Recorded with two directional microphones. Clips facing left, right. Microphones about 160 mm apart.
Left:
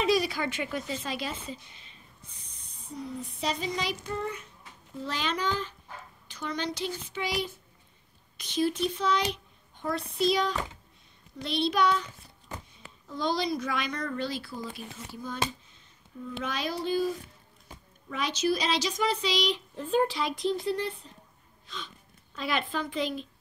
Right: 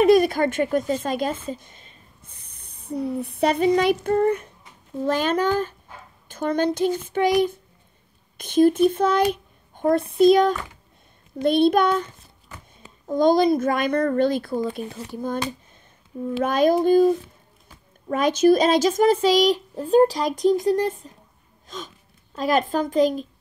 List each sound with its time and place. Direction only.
0.0 s speech: 55° right (ahead or behind)